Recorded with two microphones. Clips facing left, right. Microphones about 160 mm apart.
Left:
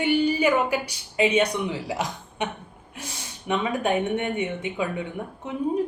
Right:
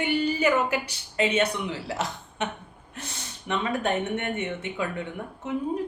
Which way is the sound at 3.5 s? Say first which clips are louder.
Left 3 dB; 15° left (ahead or behind).